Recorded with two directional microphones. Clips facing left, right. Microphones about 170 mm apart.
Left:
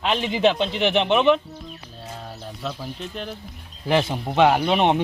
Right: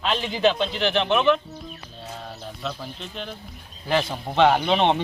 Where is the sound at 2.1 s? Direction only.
5° left (ahead or behind).